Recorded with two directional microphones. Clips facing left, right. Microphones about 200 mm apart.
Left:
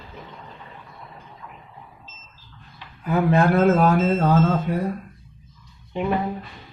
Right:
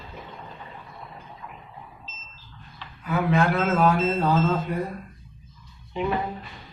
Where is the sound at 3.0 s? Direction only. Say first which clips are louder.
Left 4 dB; 35° left (ahead or behind).